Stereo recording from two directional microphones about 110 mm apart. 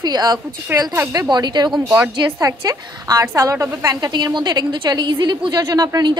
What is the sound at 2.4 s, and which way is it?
A woman's voice, 30° right (ahead or behind).